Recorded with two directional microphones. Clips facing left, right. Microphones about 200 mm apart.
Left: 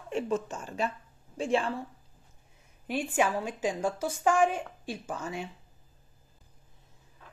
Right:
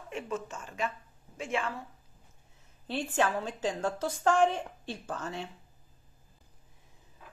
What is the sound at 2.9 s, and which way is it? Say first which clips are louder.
A woman's voice: left 2 dB; 10° left (ahead or behind).